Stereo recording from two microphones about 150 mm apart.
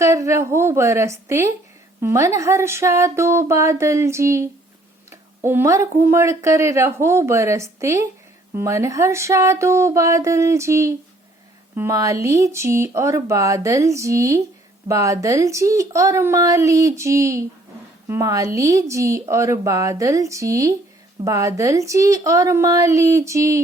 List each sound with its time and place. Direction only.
0.0 s speech: 20° right (ahead or behind)